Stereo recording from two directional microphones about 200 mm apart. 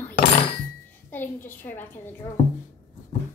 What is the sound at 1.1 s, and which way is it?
Speech, 10° left (ahead or behind).